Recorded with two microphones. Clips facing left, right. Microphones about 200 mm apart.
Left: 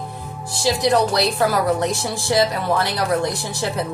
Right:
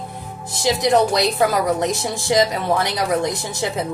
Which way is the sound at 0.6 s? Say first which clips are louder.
Right 1 dB; 20° right (ahead or behind).